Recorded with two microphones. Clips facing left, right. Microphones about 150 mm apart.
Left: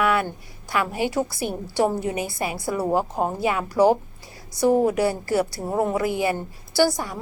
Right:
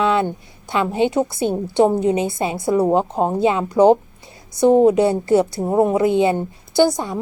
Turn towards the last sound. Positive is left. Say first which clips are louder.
# right 5 dB
turn(degrees=-20)  # may be behind; listen again after turning